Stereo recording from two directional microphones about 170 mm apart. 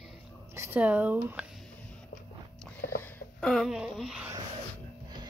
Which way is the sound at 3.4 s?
Centre (ahead or behind).